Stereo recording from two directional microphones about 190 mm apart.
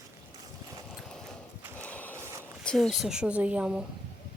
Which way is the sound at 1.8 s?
10° left (ahead or behind).